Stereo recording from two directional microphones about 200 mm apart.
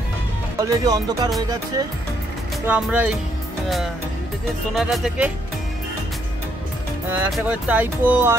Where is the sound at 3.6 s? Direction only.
Centre (ahead or behind).